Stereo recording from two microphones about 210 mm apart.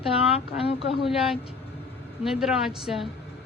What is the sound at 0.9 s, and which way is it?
Speech, centre (ahead or behind).